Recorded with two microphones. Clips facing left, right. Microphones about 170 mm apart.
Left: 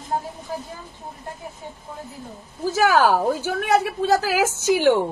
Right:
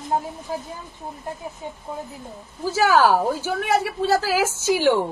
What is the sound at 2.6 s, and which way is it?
A woman's voice, 15° left (ahead or behind).